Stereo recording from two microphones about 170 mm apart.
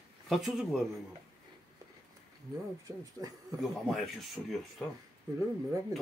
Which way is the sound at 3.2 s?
20° right (ahead or behind).